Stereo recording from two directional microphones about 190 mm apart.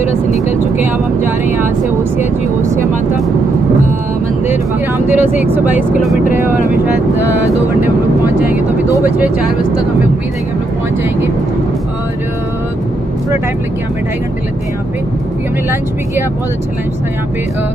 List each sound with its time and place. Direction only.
0.1 s speech: 35° left (ahead or behind)
0.7 s speech: 10° right (ahead or behind)
4.5 s speech: 10° right (ahead or behind)